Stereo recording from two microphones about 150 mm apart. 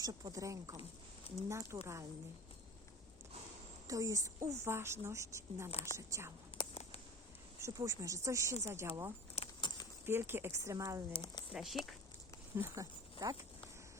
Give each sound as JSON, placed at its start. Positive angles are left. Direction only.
{"t": 0.0, "sound": "a woman's voice", "side_deg": -25}
{"t": 3.8, "sound": "a woman's voice", "side_deg": -25}
{"t": 6.6, "sound": "a sound", "side_deg": 40}
{"t": 7.6, "sound": "a woman's voice", "side_deg": -20}
{"t": 9.3, "sound": "keys jangling", "side_deg": 35}
{"t": 10.1, "sound": "a woman's voice", "side_deg": -15}
{"t": 11.1, "sound": "speech", "side_deg": 30}
{"t": 11.5, "sound": "speech", "side_deg": 0}
{"t": 12.5, "sound": "speech", "side_deg": -20}